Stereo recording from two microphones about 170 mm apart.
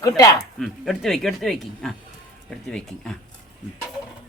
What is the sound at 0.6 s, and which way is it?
Speech, centre (ahead or behind).